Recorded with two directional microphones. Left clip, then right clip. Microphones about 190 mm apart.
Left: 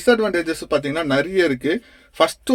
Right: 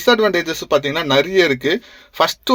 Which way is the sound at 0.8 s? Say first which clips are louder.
Right 4 dB; 15° right (ahead or behind).